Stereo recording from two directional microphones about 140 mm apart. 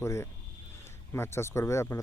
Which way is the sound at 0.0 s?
20° left (ahead or behind).